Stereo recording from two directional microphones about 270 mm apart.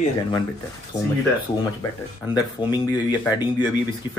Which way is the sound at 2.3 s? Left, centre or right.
Centre.